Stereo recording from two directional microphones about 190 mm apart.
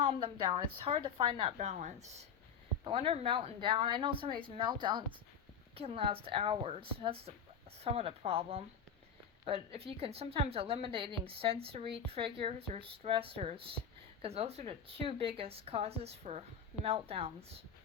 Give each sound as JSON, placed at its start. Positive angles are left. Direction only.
{"t": 0.0, "sound": "speech", "side_deg": -30}
{"t": 1.5, "sound": "speech", "side_deg": -40}